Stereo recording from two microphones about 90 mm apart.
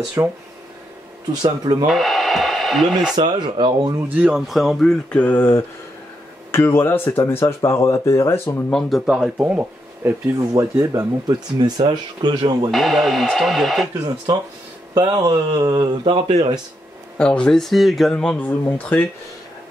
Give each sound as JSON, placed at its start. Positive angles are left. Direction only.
{"t": 0.2, "sound": "speech", "side_deg": -35}
{"t": 1.4, "sound": "speech", "side_deg": -50}
{"t": 1.9, "sound": "speech", "side_deg": 0}
{"t": 3.2, "sound": "speech", "side_deg": -55}
{"t": 4.1, "sound": "speech", "side_deg": -15}
{"t": 4.5, "sound": "speech", "side_deg": 0}
{"t": 5.1, "sound": "speech", "side_deg": 20}
{"t": 8.7, "sound": "speech", "side_deg": 0}
{"t": 9.0, "sound": "speech", "side_deg": -10}
{"t": 10.5, "sound": "speech", "side_deg": -40}
{"t": 12.7, "sound": "speech", "side_deg": 0}
{"t": 14.0, "sound": "speech", "side_deg": -45}
{"t": 16.0, "sound": "speech", "side_deg": -75}
{"t": 17.2, "sound": "speech", "side_deg": 10}